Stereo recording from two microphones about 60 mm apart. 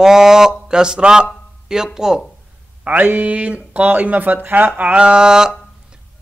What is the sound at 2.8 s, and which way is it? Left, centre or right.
Speech, right.